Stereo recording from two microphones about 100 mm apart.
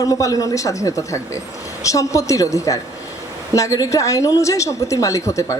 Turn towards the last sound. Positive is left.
turn(degrees=30)  # may be behind; listen again after turning